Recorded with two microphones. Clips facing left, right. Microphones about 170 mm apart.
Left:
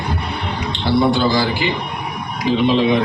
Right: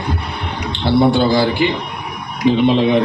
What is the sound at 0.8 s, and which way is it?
Speech, 55° right (ahead or behind).